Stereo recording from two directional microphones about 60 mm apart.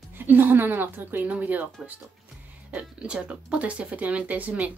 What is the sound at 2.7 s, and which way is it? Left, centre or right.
Speech, centre.